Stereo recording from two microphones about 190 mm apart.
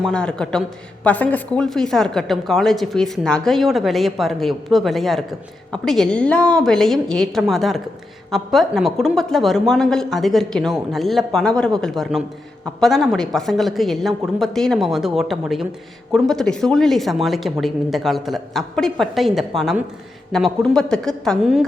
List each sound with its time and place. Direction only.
0.0 s a woman's voice: 5° left (ahead or behind)